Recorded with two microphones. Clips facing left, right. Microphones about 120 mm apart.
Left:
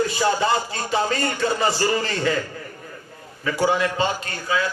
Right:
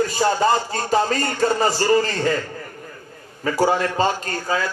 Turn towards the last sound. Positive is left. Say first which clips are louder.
# right 1 dB
turn(degrees=-40)  # may be behind; listen again after turning